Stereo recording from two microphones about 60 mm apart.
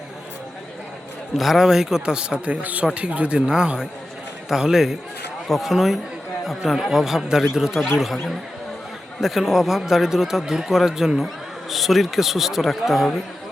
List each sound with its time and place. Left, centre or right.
1.4 s speech: centre
9.2 s speech: centre